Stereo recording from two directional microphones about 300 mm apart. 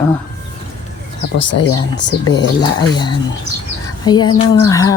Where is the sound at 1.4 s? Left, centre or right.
Left.